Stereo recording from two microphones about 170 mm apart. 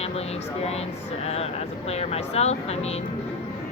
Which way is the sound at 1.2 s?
35° left (ahead or behind).